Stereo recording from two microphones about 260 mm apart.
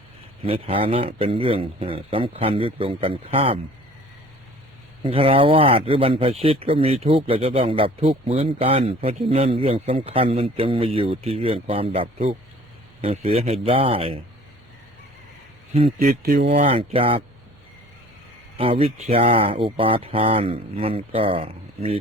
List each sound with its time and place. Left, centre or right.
0.4 s speech: right
5.0 s speech: right
16.0 s speech: right
16.6 s speech: right
18.5 s speech: right